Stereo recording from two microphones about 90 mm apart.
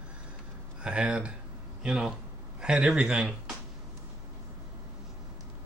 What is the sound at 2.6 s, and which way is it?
Speech, 10° right (ahead or behind).